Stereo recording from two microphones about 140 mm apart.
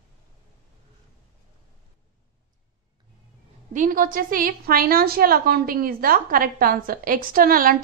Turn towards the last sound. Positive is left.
turn(degrees=-90)